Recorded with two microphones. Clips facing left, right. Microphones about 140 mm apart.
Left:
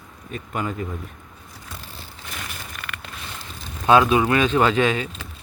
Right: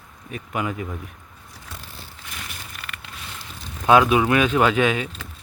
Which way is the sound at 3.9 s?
10° right (ahead or behind).